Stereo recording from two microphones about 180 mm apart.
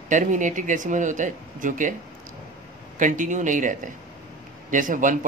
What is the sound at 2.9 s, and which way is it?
Speech, 45° right (ahead or behind).